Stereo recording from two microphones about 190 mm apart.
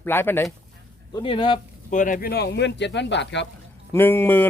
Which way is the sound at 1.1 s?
25° left (ahead or behind).